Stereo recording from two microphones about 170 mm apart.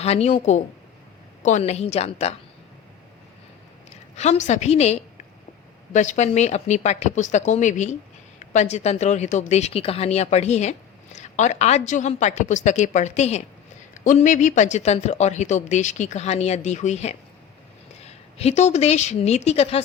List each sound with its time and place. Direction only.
0.0 s a woman's voice: 40° left (ahead or behind)
4.2 s a woman's voice: 40° left (ahead or behind)